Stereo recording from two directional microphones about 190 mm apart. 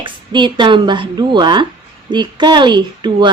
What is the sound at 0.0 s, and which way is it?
A woman's voice, 25° right (ahead or behind).